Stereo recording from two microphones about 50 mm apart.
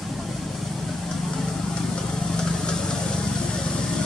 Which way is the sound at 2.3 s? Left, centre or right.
Centre.